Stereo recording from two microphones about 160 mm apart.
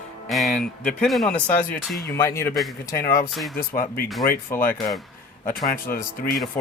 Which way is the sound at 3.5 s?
65° left (ahead or behind).